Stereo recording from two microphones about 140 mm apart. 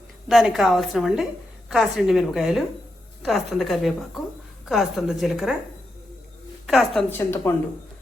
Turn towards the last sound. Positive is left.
turn(degrees=15)  # may be behind; listen again after turning